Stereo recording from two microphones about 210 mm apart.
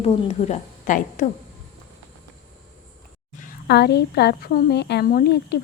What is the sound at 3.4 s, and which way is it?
A woman's voice, 50° left (ahead or behind).